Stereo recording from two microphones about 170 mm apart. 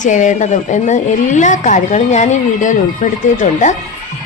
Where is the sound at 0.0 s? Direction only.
45° left (ahead or behind).